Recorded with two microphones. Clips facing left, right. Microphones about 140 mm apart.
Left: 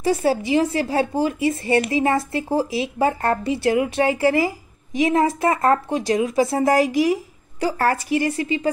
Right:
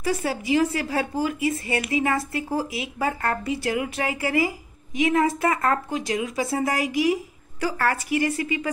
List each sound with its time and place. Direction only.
0.0 s a woman's voice: 30° left (ahead or behind)